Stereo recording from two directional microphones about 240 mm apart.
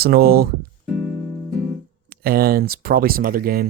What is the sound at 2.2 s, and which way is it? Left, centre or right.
Speech, right.